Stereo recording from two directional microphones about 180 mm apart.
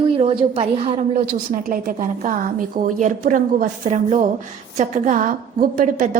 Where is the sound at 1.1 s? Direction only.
50° right (ahead or behind).